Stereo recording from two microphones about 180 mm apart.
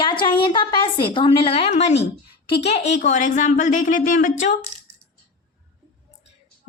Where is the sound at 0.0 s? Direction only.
25° left (ahead or behind); by 4.5 s 45° left (ahead or behind).